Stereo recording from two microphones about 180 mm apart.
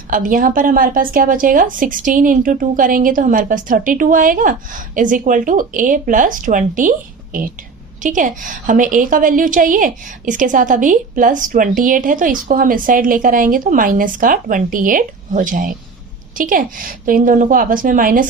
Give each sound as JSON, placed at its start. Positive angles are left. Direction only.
{"t": 0.1, "sound": "a woman's voice", "side_deg": -50}